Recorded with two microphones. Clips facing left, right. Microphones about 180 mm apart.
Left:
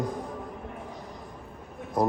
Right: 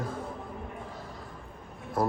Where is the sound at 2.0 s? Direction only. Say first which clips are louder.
Left 3 dB; 20° left (ahead or behind).